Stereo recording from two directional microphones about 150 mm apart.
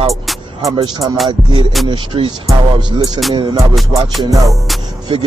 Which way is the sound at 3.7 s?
Centre (ahead or behind).